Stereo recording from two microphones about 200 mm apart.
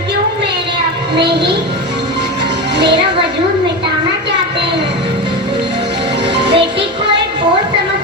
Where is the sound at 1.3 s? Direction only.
60° right (ahead or behind).